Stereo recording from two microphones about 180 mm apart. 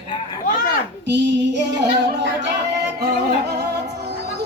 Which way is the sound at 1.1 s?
70° right (ahead or behind).